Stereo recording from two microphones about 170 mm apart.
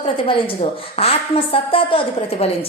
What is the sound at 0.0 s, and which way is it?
A woman's voice, 30° left (ahead or behind).